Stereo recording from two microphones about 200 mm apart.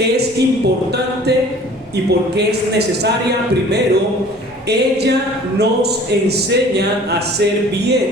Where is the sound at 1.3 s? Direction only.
55° right (ahead or behind).